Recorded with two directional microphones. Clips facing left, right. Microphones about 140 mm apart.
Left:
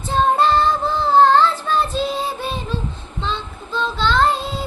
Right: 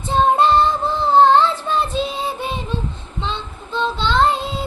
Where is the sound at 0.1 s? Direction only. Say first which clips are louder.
Right 1 dB; 20° right (ahead or behind).